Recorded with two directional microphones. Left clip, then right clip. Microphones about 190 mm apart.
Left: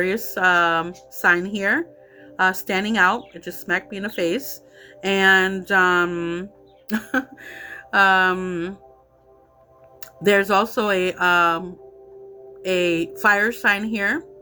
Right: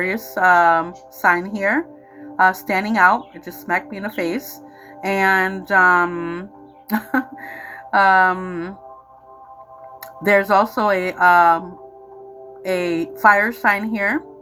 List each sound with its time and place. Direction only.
0.0 s speech: 30° left (ahead or behind)
10.2 s speech: 30° left (ahead or behind)